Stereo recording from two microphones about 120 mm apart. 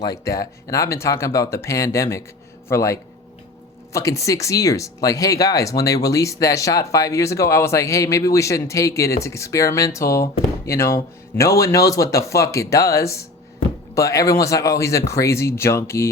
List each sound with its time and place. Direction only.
0.0 s speech: 30° left (ahead or behind)